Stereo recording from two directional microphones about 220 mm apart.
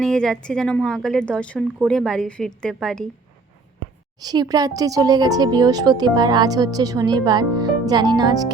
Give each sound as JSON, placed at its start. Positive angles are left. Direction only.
{"t": 0.0, "sound": "a woman's voice", "side_deg": 0}
{"t": 4.2, "sound": "speech", "side_deg": -15}